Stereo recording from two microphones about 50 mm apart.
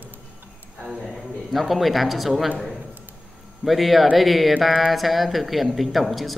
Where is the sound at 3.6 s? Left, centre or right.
Centre.